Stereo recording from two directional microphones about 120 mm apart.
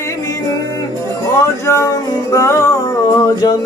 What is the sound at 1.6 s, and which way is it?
Music, 25° left (ahead or behind).